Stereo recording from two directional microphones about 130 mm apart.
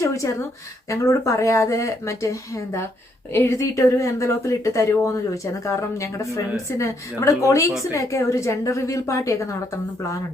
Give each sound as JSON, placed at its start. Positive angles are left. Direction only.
{"t": 0.0, "sound": "speech", "side_deg": 25}